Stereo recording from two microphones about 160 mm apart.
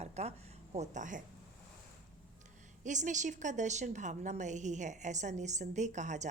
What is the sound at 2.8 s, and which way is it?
A woman's voice, 50° right (ahead or behind).